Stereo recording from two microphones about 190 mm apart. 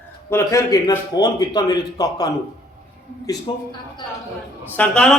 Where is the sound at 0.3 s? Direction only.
15° left (ahead or behind).